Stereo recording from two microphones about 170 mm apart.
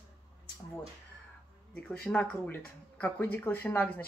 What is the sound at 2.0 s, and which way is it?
Speech, 5° left (ahead or behind).